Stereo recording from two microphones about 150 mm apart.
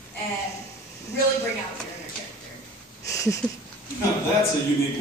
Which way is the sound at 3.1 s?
20° left (ahead or behind).